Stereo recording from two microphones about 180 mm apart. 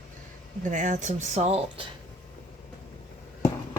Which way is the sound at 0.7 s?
45° right (ahead or behind).